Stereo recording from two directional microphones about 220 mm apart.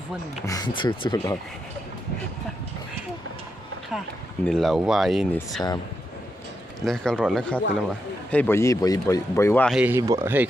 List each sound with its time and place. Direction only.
0.5 s speech: 20° left (ahead or behind)
4.5 s speech: centre (ahead or behind)
6.8 s speech: centre (ahead or behind)
9.7 s speech: 5° right (ahead or behind)